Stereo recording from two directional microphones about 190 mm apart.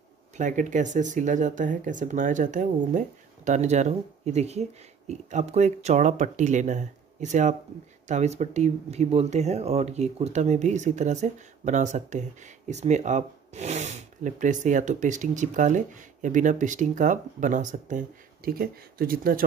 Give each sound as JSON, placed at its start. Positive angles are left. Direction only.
{"t": 0.4, "sound": "speech", "side_deg": -40}